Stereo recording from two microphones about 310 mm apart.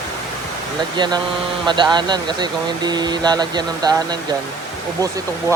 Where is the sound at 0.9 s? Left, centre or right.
Centre.